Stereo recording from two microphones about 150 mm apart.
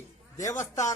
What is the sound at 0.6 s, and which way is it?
Speech, 20° left (ahead or behind).